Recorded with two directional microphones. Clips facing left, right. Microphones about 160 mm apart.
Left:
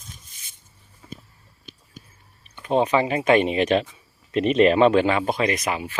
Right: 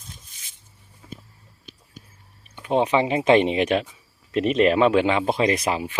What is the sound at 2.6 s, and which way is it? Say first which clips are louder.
Speech: even; 15° right (ahead or behind).